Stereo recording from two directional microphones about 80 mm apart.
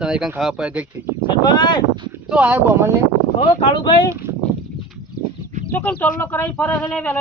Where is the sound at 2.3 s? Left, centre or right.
Centre.